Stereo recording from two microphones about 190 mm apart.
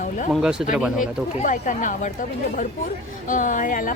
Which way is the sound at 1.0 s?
45° left (ahead or behind).